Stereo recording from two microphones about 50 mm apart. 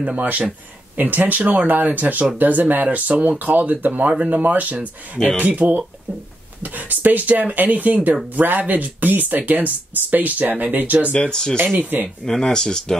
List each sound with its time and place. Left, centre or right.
0.2 s speech: right
11.1 s speech: centre